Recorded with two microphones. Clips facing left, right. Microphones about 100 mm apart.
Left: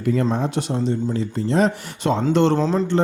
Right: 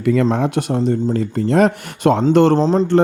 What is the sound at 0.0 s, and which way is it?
Speech, 75° right (ahead or behind).